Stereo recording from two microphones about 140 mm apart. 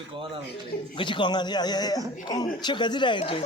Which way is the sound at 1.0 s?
35° left (ahead or behind).